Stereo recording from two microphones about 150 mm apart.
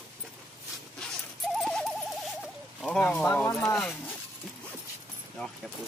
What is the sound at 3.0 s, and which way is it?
Speech, 10° left (ahead or behind).